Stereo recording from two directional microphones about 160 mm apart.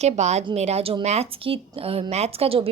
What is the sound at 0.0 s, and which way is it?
A woman's voice, 45° right (ahead or behind).